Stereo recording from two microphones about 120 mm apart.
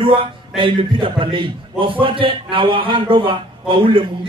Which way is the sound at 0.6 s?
40° right (ahead or behind).